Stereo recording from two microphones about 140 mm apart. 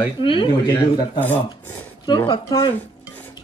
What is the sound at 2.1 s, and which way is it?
Speech, 30° left (ahead or behind).